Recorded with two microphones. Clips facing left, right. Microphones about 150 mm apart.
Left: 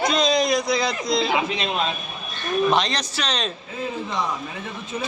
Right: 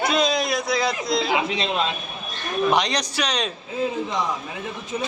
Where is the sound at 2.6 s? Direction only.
15° right (ahead or behind).